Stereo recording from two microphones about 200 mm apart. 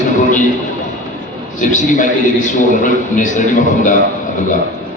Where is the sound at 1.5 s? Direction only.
40° left (ahead or behind).